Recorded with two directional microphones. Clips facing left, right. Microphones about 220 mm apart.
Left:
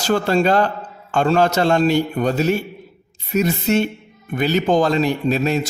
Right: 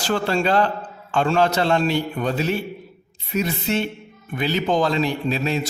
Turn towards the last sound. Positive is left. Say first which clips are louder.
# left 4 dB
turn(degrees=45)  # may be behind; listen again after turning